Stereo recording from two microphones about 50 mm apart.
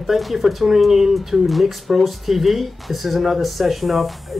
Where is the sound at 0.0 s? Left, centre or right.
Centre.